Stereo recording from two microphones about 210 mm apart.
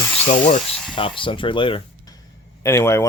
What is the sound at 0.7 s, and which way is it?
Speech, centre (ahead or behind).